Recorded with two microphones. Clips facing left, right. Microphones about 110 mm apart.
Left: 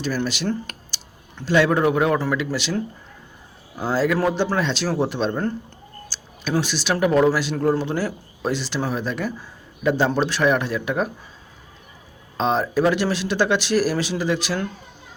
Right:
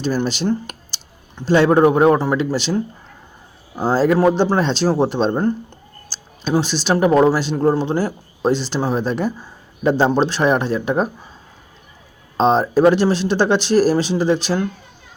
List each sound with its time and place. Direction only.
0.0 s speech: 25° right (ahead or behind)
0.4 s computer keyboard: 25° right (ahead or behind)
1.5 s speech: 30° right (ahead or behind)
12.4 s speech: 30° right (ahead or behind)